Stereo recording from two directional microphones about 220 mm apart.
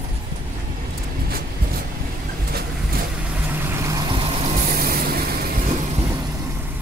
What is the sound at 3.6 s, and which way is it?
Vehicle, 10° right (ahead or behind).